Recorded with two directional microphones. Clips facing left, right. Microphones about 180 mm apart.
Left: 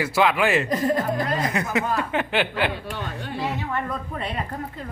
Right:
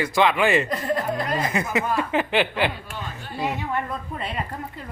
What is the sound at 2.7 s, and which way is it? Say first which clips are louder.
Speech: left 4 dB; 65° left (ahead or behind).